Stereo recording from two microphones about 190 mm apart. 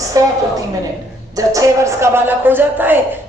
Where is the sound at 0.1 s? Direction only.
15° right (ahead or behind).